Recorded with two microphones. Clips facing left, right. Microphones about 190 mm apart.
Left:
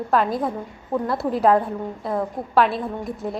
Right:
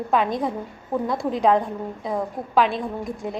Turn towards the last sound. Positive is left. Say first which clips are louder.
# left 1 dB
turn(degrees=0)  # may be behind; listen again after turning